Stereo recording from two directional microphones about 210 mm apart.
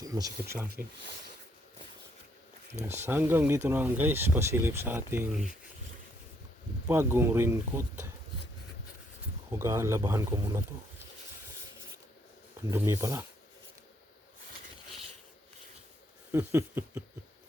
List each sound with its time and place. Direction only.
0.0 s speech: 15° right (ahead or behind)
0.7 s speech: 50° right (ahead or behind)
2.7 s speech: 10° right (ahead or behind)
6.8 s speech: 10° right (ahead or behind)
9.5 s speech: 15° right (ahead or behind)
12.7 s speech: 15° right (ahead or behind)
16.3 s speech: 10° right (ahead or behind)